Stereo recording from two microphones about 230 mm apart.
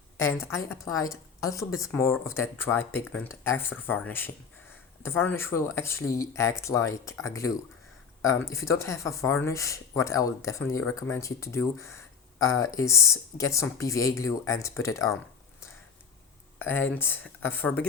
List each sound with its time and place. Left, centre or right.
0.2 s speech: centre
16.6 s speech: centre